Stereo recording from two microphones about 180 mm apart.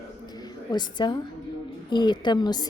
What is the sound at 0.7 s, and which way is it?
Speech, 25° left (ahead or behind).